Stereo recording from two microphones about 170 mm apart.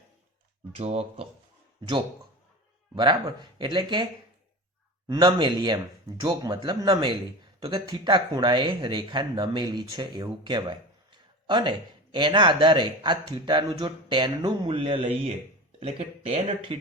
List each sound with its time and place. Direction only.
0.8 s speech: 35° right (ahead or behind)
2.9 s speech: 25° right (ahead or behind)